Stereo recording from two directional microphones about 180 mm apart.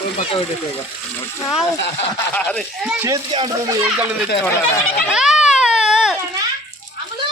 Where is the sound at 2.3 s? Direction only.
5° left (ahead or behind).